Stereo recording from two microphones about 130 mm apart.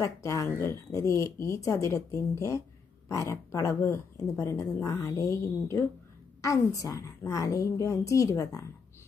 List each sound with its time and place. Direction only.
0.0 s speech: 25° left (ahead or behind)